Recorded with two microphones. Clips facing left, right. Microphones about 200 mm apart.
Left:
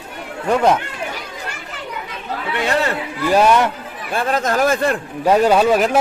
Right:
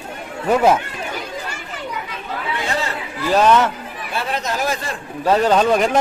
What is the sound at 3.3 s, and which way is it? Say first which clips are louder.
Speech: even; 10° left (ahead or behind).